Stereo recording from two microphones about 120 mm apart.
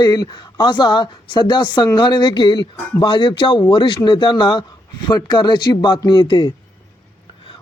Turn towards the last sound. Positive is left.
turn(degrees=40)  # may be behind; listen again after turning